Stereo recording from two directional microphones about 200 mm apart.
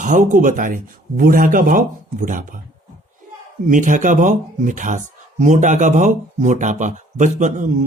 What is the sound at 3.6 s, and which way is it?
Speech, 40° right (ahead or behind).